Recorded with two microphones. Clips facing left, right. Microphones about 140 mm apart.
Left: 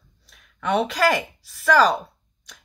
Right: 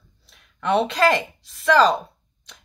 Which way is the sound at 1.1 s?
5° left (ahead or behind).